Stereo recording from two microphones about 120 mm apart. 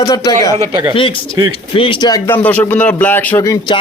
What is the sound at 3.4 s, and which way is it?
Speech, 30° left (ahead or behind).